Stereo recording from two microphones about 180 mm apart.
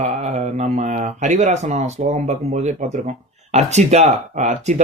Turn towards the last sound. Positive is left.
turn(degrees=-40)  # may be behind; listen again after turning